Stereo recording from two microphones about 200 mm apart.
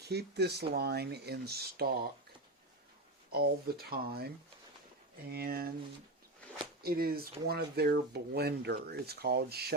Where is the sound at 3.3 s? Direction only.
50° right (ahead or behind).